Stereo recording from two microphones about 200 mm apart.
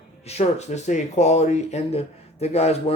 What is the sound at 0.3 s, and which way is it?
Speech, 35° left (ahead or behind).